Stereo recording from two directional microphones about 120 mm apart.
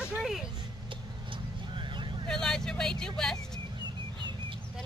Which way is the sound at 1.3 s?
45° right (ahead or behind).